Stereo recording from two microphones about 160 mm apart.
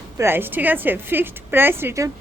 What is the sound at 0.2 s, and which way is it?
A woman's voice, 15° right (ahead or behind).